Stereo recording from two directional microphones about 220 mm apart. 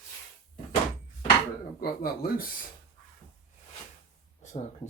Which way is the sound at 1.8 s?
45° left (ahead or behind).